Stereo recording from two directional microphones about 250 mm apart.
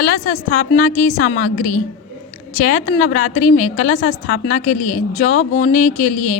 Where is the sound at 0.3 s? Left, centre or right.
Left.